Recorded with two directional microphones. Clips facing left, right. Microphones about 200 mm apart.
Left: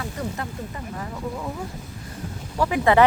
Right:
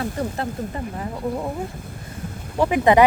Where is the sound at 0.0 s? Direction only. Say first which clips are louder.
Right 4 dB; 35° right (ahead or behind).